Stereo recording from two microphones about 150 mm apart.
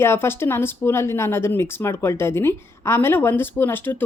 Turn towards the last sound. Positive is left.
turn(degrees=15)  # may be behind; listen again after turning